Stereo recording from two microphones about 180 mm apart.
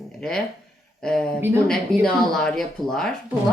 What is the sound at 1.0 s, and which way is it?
A woman's voice, 5° left (ahead or behind).